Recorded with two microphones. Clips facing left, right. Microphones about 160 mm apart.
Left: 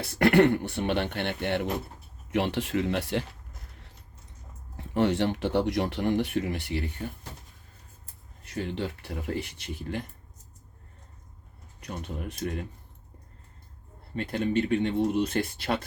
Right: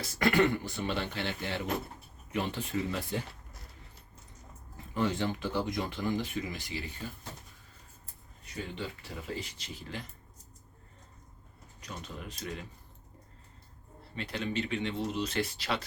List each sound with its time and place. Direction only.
0.0 s speech: 65° left (ahead or behind)
2.3 s speech: 80° left
4.8 s speech: 70° left (ahead or behind)
8.4 s speech: 75° left (ahead or behind); by 10.1 s 55° left (ahead or behind)
11.8 s speech: 55° left (ahead or behind)
14.2 s speech: 50° left (ahead or behind)